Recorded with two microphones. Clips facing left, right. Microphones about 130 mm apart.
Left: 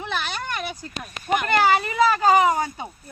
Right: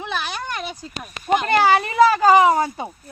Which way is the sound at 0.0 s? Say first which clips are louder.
Right 1 dB; 15° right (ahead or behind).